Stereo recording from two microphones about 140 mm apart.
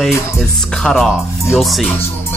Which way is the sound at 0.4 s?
5° left (ahead or behind).